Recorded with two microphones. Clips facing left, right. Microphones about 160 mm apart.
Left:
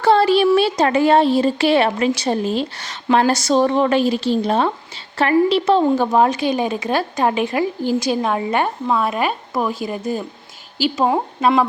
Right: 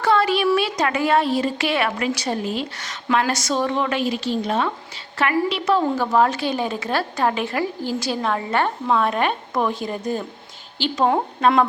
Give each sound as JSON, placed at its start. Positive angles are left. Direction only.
{"t": 0.0, "sound": "a woman's voice", "side_deg": 30}